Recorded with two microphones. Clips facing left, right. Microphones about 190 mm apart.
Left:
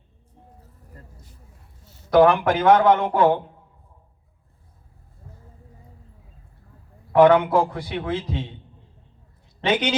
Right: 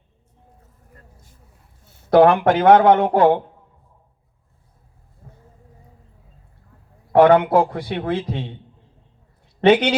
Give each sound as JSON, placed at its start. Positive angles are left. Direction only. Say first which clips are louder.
{"t": 1.8, "sound": "a man's voice", "louder": "right 3 dB", "side_deg": -55}
{"t": 7.1, "sound": "a man's voice", "louder": "right 2 dB", "side_deg": -60}
{"t": 9.6, "sound": "a man's voice", "louder": "right 8 dB", "side_deg": -60}